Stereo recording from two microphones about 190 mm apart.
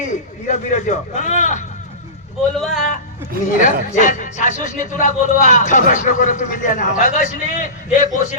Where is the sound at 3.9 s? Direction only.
40° left (ahead or behind).